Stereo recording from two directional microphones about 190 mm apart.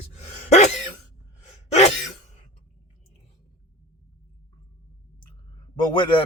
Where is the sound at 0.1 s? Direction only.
35° left (ahead or behind).